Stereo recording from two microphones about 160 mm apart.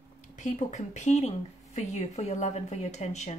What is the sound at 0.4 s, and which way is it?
A woman's voice, 50° left (ahead or behind).